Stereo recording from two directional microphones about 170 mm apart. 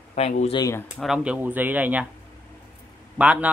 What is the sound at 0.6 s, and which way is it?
Speech, 20° left (ahead or behind).